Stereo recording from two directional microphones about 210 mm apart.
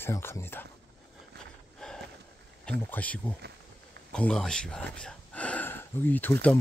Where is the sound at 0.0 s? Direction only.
10° left (ahead or behind).